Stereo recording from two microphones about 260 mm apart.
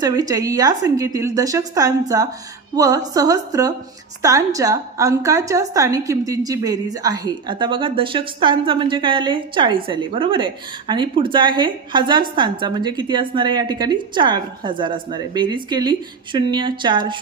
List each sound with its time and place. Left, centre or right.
0.0 s a woman's voice: centre